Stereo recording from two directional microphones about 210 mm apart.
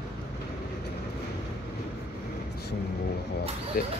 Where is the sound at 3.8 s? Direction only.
45° left (ahead or behind).